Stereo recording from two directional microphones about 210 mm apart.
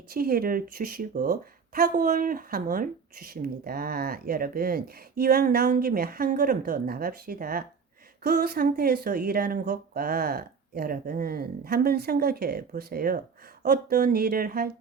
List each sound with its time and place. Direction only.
0.1 s a woman's voice: 45° right (ahead or behind)